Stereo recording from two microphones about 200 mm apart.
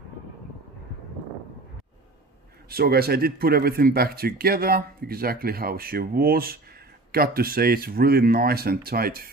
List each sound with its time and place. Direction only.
2.7 s speech: 50° right (ahead or behind)